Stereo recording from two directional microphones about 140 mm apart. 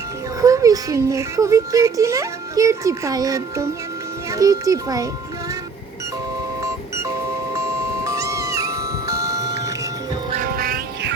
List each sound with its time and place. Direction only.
0.4 s speech: 25° right (ahead or behind)
6.6 s music: 20° right (ahead or behind)
7.5 s cat: 20° right (ahead or behind)
9.2 s music: 25° right (ahead or behind)
10.3 s music: 90° right